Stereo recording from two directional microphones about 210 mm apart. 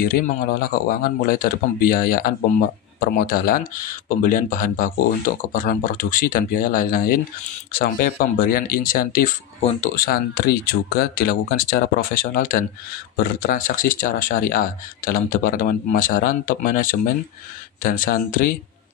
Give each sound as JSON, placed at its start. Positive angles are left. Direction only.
{"t": 0.0, "sound": "speech", "side_deg": 40}
{"t": 10.0, "sound": "speech", "side_deg": 50}